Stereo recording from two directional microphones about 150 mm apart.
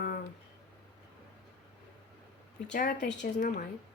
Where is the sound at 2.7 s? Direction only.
70° left (ahead or behind).